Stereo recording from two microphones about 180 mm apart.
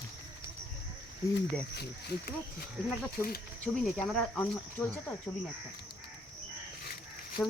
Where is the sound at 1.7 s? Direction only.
65° left (ahead or behind).